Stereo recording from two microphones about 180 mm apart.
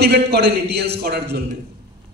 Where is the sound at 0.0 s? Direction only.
65° right (ahead or behind).